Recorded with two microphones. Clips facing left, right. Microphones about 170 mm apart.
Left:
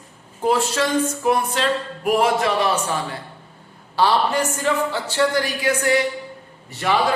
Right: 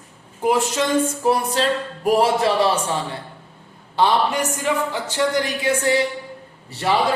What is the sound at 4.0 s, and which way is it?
A woman's voice, 20° right (ahead or behind).